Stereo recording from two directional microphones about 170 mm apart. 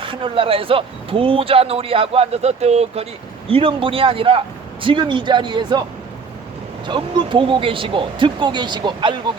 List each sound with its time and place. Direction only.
0.0 s speech: 30° right (ahead or behind)
6.8 s speech: 30° right (ahead or behind)